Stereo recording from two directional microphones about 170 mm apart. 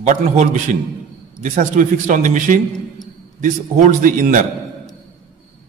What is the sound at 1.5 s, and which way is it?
Speech, 45° right (ahead or behind).